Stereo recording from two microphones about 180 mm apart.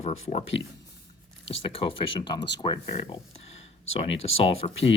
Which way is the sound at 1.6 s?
30° left (ahead or behind).